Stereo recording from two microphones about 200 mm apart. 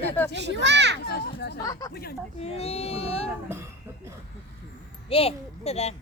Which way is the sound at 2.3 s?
30° left (ahead or behind).